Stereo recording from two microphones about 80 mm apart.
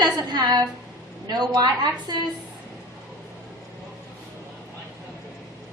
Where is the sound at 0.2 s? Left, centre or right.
Right.